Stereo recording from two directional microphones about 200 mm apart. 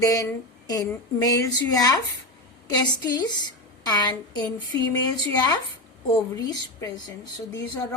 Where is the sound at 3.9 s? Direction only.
20° left (ahead or behind).